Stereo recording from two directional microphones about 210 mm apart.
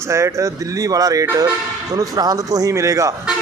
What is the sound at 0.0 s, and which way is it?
Speech, 15° right (ahead or behind).